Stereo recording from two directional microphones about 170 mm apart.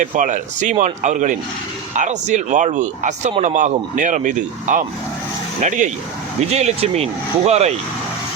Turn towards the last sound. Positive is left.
turn(degrees=-40)  # may be behind; listen again after turning